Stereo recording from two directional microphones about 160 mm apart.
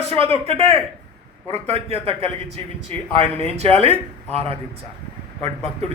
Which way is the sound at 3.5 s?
40° right (ahead or behind).